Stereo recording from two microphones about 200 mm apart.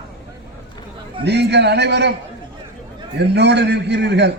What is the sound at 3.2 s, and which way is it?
A man's voice, 60° right (ahead or behind).